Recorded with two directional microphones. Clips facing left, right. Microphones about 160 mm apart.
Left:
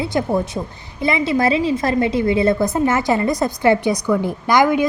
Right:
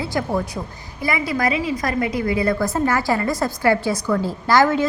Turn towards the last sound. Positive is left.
turn(degrees=15)  # may be behind; listen again after turning